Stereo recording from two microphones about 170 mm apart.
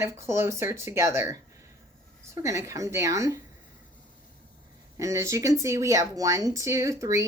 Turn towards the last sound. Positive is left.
turn(degrees=-20)  # may be behind; listen again after turning